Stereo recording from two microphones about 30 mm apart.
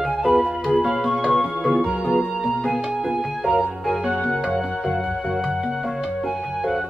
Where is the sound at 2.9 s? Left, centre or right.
Centre.